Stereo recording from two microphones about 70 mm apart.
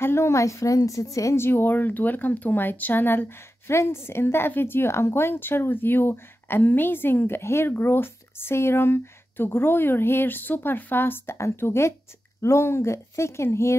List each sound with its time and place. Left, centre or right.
0.0 s a woman's voice: left
1.4 s a woman's voice: left